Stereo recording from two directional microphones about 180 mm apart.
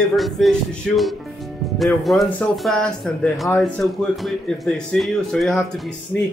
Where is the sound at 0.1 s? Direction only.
Centre (ahead or behind).